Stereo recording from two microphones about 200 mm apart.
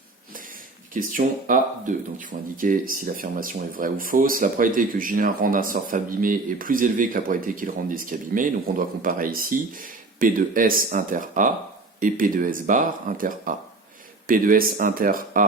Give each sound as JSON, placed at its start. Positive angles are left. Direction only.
{"t": 0.9, "sound": "speech", "side_deg": -45}